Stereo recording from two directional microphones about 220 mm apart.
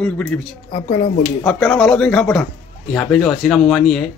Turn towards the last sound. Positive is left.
turn(degrees=0)  # may be behind; listen again after turning